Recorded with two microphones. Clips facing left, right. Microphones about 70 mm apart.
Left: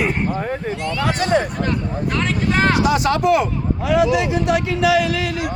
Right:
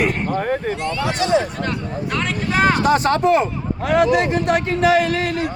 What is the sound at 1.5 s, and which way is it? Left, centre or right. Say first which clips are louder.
Speech: left 2 dB; centre.